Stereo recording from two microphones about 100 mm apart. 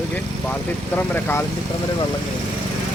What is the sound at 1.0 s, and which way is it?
Speech, 20° left (ahead or behind).